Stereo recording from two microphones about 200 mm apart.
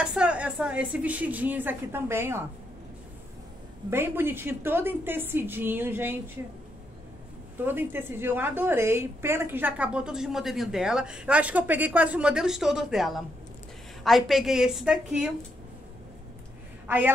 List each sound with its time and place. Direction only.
0.0 s speech: 5° right (ahead or behind)
3.9 s a woman's voice: 10° right (ahead or behind)
7.5 s a woman's voice: 10° right (ahead or behind)
16.8 s a woman's voice: 10° right (ahead or behind)